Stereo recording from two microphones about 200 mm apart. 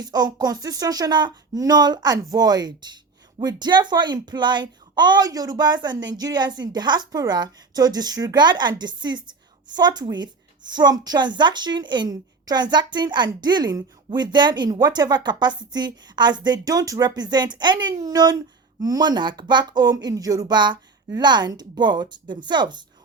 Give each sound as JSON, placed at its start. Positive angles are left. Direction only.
{"t": 0.0, "sound": "speech", "side_deg": -20}